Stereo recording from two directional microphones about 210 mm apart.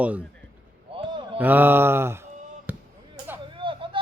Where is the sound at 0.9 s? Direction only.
25° right (ahead or behind).